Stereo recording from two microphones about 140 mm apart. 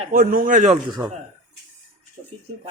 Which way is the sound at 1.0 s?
30° right (ahead or behind).